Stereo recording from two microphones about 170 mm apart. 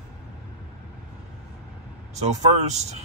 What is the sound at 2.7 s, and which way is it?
Speech, 40° right (ahead or behind).